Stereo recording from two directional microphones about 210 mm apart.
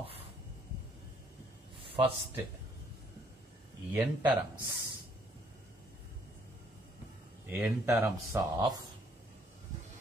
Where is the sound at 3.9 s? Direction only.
10° right (ahead or behind).